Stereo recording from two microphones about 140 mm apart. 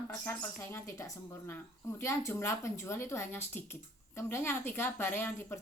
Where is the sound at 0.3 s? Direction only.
20° left (ahead or behind).